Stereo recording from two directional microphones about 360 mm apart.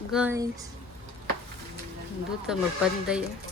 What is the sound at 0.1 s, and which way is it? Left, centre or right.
Speech, centre.